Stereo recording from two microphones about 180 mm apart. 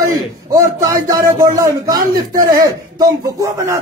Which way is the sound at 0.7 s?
20° right (ahead or behind).